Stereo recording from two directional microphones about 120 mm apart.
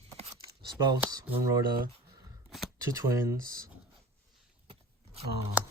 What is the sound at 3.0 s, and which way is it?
Speech, 25° right (ahead or behind).